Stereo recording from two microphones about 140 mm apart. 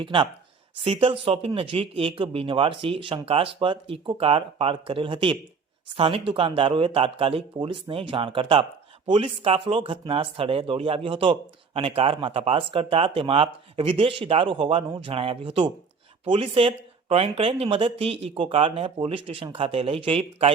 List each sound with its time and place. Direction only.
0.0 s speech: 35° right (ahead or behind)